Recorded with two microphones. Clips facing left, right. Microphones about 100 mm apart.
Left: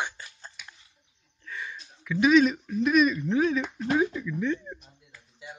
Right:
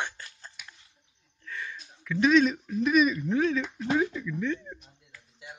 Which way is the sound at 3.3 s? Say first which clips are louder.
Left 1 dB; 10° left (ahead or behind).